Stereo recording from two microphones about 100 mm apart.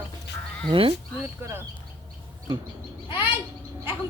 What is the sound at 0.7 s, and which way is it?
Speech, 65° right (ahead or behind).